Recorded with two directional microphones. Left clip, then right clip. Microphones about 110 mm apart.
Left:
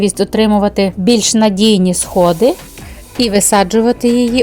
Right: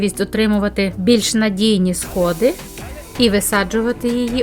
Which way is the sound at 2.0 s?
Centre (ahead or behind).